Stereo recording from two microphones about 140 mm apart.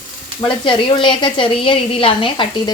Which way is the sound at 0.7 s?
35° left (ahead or behind).